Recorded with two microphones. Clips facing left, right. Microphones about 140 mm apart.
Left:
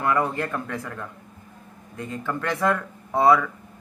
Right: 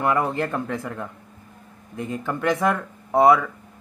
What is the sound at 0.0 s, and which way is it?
A man's voice, 20° right (ahead or behind).